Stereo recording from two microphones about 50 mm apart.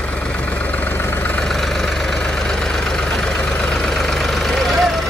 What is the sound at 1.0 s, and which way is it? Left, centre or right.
Vehicle, left.